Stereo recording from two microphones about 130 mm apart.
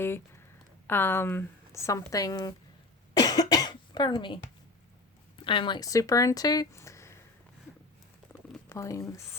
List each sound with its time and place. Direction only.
0.0 s a woman's voice: 20° left (ahead or behind)
3.2 s cough: 30° left (ahead or behind)
5.4 s speech: 40° left (ahead or behind); by 7.2 s 20° left (ahead or behind)
8.3 s a sound: 20° left (ahead or behind)